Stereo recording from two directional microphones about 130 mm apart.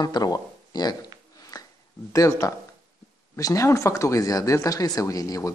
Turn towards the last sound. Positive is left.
turn(degrees=25)  # may be behind; listen again after turning